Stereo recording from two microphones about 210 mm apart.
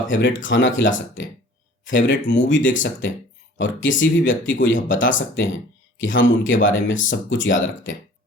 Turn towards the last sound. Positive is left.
turn(degrees=65)  # may be behind; listen again after turning